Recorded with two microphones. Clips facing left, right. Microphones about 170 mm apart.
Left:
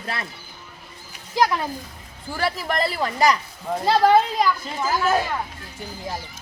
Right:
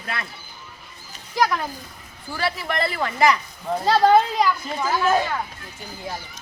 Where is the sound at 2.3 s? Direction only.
40° left (ahead or behind).